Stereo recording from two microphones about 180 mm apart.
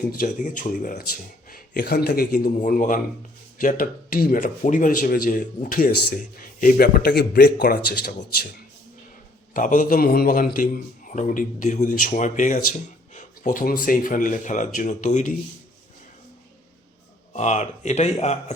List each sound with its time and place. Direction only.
0.0 s a man's voice: 50° left (ahead or behind)
9.6 s a man's voice: 45° left (ahead or behind)
17.3 s speech: 40° left (ahead or behind)